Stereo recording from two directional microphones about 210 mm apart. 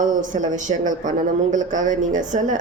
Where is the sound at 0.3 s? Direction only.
35° right (ahead or behind).